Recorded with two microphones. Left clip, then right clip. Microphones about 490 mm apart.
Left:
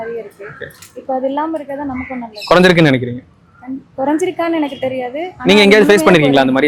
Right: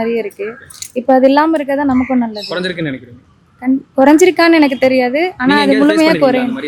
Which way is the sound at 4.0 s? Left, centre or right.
Right.